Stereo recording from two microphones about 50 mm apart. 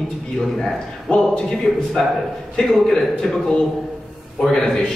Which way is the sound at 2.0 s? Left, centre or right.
Centre.